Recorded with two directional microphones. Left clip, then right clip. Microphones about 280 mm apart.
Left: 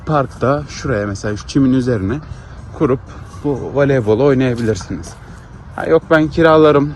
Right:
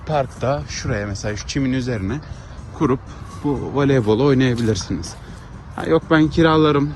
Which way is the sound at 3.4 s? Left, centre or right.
Right.